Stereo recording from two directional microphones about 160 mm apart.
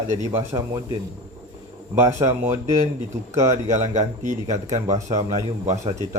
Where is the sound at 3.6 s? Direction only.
45° right (ahead or behind).